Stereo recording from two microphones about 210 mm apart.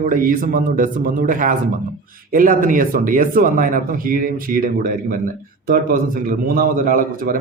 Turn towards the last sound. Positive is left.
turn(degrees=-40)  # may be behind; listen again after turning